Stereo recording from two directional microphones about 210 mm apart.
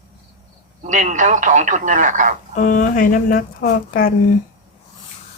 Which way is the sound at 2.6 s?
40° left (ahead or behind).